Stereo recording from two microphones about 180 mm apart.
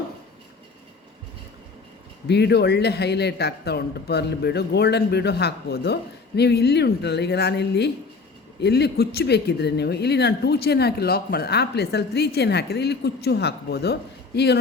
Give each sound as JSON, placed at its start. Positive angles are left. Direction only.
{"t": 2.2, "sound": "speech", "side_deg": 65}